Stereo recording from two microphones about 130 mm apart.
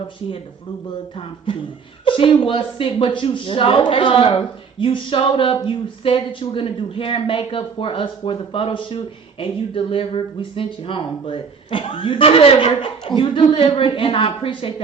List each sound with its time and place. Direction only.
1.1 s speech: 45° left (ahead or behind)